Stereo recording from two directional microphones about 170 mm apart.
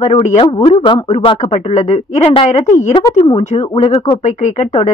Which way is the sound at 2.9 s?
25° left (ahead or behind).